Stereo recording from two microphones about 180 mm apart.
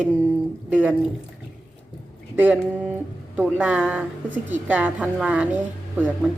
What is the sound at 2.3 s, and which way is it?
Speech, 10° right (ahead or behind).